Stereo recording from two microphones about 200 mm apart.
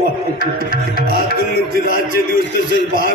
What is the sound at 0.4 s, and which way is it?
Music, 50° right (ahead or behind).